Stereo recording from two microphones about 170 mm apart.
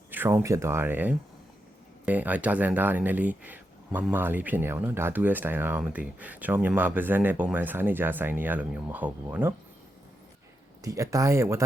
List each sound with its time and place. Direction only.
0.1 s speech: 10° right (ahead or behind)
10.8 s speech: 20° right (ahead or behind)